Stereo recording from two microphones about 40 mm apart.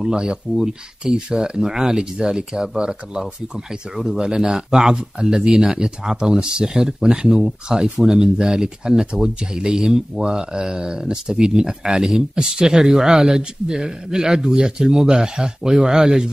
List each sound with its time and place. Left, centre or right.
0.0 s speech: right